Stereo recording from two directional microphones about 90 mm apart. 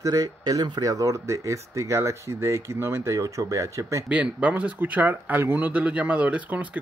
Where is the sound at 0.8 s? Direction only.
40° right (ahead or behind).